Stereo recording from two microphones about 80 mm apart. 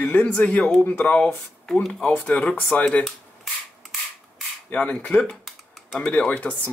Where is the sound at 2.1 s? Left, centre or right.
Centre.